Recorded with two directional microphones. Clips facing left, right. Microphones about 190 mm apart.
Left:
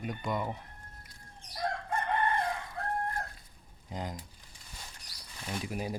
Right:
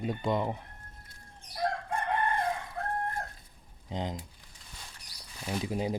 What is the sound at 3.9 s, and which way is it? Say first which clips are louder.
Speech: right 4 dB; 25° right (ahead or behind).